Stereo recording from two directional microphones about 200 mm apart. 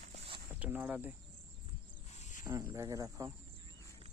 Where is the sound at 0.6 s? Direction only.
10° right (ahead or behind).